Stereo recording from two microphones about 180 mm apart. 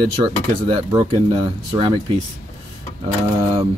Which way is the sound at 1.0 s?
30° right (ahead or behind).